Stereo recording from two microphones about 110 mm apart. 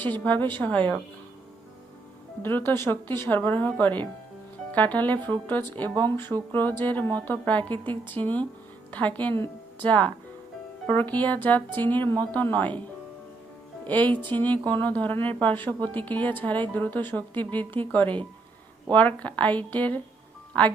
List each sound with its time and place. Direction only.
0.0 s a woman's voice: 15° left (ahead or behind)
2.4 s a woman's voice: 20° left (ahead or behind)
13.8 s a woman's voice: 15° left (ahead or behind)